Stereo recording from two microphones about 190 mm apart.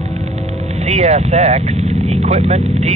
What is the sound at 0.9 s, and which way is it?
Speech, 40° right (ahead or behind).